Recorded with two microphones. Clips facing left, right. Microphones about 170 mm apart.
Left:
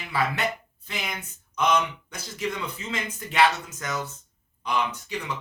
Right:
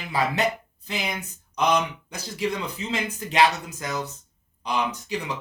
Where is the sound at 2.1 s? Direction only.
35° right (ahead or behind).